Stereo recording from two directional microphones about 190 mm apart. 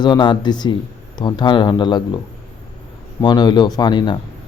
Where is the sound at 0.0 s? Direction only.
25° left (ahead or behind).